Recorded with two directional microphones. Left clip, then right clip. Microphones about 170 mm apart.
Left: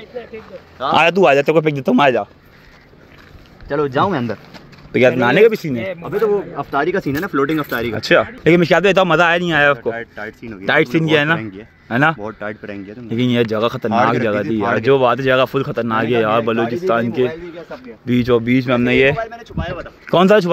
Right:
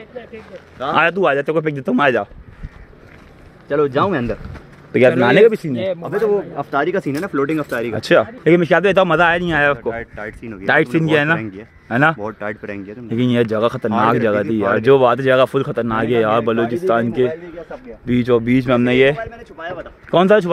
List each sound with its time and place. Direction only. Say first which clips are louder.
0.9 s speech: left 3 dB; 20° left (ahead or behind)
3.6 s speech: right 1 dB; 15° left (ahead or behind)
5.2 s a man's voice: right 1 dB; 10° right (ahead or behind); by 7.5 s 15° left (ahead or behind)
7.5 s speech: left 1 dB; 30° left (ahead or behind)
8.0 s a man's voice: even; 10° right (ahead or behind)
8.5 s a man's voice: left 2 dB; 10° left (ahead or behind); by 17.3 s 5° right (ahead or behind)
17.3 s speech: right 1 dB; 65° left (ahead or behind)
18.0 s speech: even; centre (ahead or behind)
19.5 s speech: left 2 dB; 65° left (ahead or behind)
20.1 s speech: left 1 dB; 20° left (ahead or behind)